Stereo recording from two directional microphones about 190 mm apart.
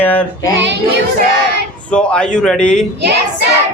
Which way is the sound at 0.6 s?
65° right (ahead or behind).